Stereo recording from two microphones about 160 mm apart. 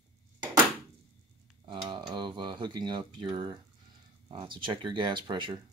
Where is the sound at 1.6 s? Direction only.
30° right (ahead or behind).